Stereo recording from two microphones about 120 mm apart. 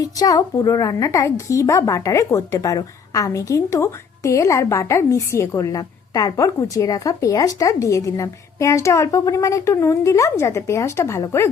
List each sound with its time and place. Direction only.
0.0 s a woman's voice: 30° left (ahead or behind)